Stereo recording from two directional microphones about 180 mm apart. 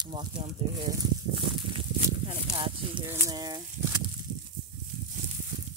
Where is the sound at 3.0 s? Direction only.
20° right (ahead or behind).